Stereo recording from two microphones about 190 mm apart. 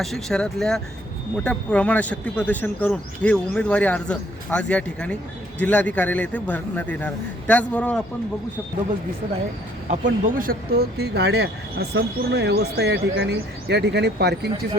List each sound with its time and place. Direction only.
0.0 s speech: centre (ahead or behind)
9.9 s speech: 40° right (ahead or behind); by 14.5 s 60° right (ahead or behind)